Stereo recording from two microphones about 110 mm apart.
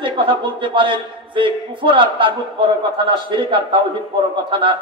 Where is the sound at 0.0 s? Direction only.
50° right (ahead or behind).